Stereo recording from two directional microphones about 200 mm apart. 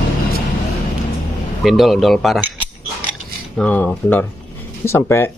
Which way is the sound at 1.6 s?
Centre (ahead or behind).